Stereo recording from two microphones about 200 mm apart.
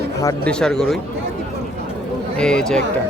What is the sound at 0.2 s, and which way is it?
Cattle, 15° left (ahead or behind).